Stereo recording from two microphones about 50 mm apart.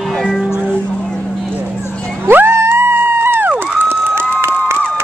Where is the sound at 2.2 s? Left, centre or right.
Right.